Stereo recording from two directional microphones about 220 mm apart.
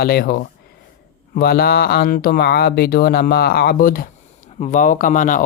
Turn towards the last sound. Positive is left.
turn(degrees=35)  # may be behind; listen again after turning